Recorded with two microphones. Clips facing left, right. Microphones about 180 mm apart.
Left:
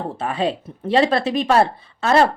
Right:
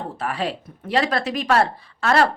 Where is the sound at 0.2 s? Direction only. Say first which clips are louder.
Left 4 dB; 25° left (ahead or behind).